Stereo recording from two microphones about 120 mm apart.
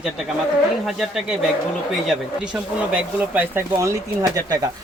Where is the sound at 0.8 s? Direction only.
Centre (ahead or behind).